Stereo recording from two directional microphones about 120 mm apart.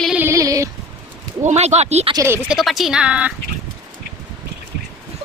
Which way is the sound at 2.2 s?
20° right (ahead or behind).